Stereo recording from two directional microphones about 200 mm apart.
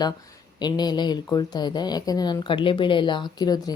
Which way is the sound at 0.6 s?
20° left (ahead or behind).